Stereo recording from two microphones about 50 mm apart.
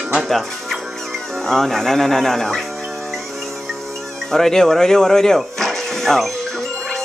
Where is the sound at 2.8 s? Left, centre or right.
Centre.